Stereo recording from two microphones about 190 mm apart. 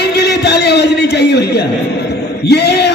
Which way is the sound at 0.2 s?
60° left (ahead or behind).